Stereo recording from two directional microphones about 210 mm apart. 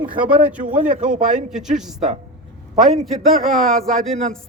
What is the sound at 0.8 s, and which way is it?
Speech, 40° right (ahead or behind).